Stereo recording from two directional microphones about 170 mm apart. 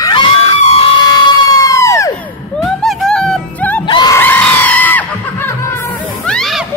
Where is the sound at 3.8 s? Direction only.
25° left (ahead or behind).